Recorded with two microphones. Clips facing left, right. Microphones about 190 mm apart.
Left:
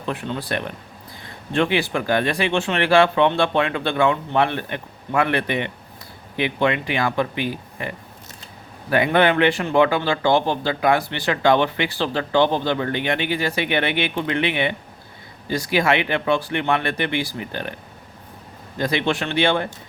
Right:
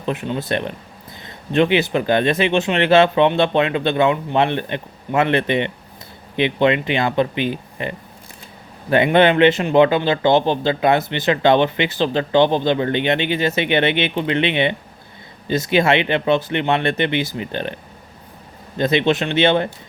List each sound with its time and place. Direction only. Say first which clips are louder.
0.0 s speech: right 4 dB; 20° right (ahead or behind)
18.8 s speech: right 5 dB; 20° right (ahead or behind)